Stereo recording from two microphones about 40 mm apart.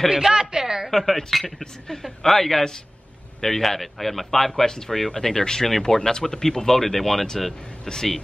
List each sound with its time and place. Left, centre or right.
0.1 s a woman's voice: centre
0.8 s a man's voice: centre